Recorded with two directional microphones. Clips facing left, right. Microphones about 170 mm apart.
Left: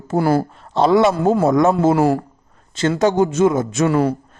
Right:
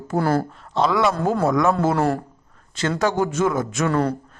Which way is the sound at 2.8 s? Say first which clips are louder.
Left 5 dB; 25° left (ahead or behind).